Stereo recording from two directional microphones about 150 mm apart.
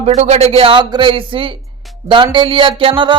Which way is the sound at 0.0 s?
45° right (ahead or behind).